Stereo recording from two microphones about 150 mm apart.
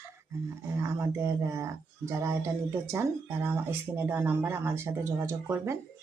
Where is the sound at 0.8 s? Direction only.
20° right (ahead or behind).